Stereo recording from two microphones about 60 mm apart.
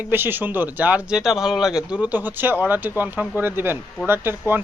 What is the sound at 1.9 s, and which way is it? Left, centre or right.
Speech, right.